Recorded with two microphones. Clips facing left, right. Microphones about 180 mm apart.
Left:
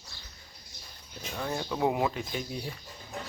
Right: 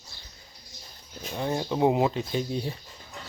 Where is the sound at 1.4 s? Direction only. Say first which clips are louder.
Right 5 dB; 25° right (ahead or behind).